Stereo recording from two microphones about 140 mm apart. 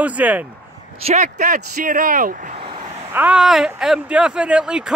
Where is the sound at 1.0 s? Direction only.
60° right (ahead or behind); by 2.3 s 80° right.